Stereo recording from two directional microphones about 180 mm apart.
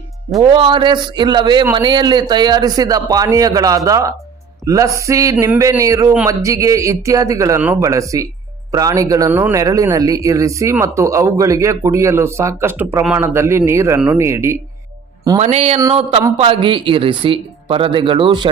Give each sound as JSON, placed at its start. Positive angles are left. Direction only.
{"t": 0.3, "sound": "speech", "side_deg": -25}
{"t": 15.4, "sound": "speech", "side_deg": -40}